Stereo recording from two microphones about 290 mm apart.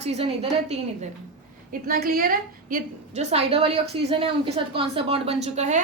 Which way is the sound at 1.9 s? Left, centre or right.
Right.